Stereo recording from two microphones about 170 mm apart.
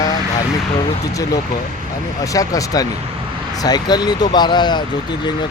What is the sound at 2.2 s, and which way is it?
Speech, 20° left (ahead or behind).